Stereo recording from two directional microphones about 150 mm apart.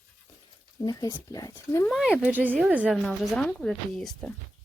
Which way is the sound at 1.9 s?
Centre (ahead or behind).